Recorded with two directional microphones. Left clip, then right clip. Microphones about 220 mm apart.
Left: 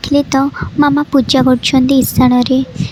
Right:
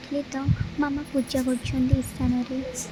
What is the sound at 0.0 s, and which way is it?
Speech, 35° left (ahead or behind).